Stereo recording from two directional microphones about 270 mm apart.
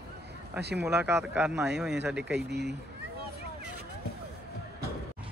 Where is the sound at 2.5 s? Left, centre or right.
Right.